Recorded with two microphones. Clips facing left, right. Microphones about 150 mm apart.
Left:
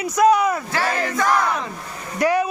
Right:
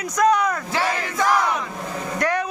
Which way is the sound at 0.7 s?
20° right (ahead or behind).